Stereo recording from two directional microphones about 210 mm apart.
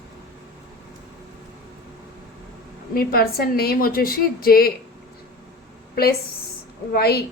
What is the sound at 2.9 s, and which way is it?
A woman's voice, 45° left (ahead or behind).